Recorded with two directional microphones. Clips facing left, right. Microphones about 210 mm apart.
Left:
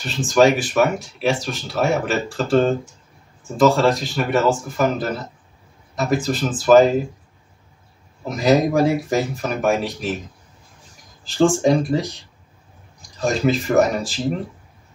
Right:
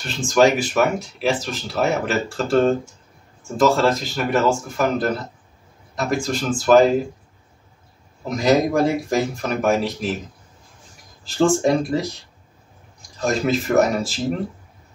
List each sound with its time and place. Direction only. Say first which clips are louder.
0.0 s speech: left 1 dB; centre (ahead or behind)
8.3 s speech: left 1 dB; centre (ahead or behind)
11.2 s speech: left 1 dB; centre (ahead or behind)
13.2 s speech: left 1 dB; centre (ahead or behind)